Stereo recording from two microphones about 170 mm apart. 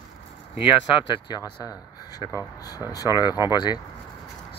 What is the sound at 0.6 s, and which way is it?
Speech, 30° left (ahead or behind).